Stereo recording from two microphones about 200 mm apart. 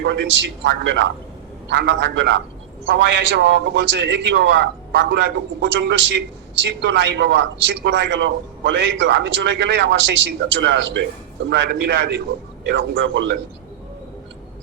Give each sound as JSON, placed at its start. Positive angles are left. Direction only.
{"t": 0.0, "sound": "a man's voice", "side_deg": -65}